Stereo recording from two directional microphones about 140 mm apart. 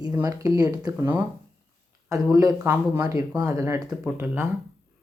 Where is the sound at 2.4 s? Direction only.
25° right (ahead or behind).